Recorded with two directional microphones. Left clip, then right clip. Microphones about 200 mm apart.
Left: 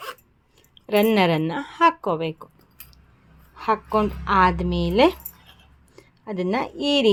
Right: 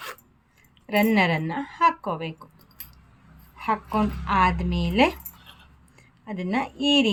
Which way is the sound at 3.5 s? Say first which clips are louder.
Left 4 dB; 35° left (ahead or behind).